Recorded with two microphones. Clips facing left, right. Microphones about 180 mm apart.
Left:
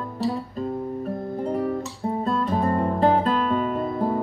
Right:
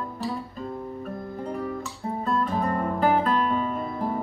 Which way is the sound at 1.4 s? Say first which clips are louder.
Left 6 dB; 30° left (ahead or behind).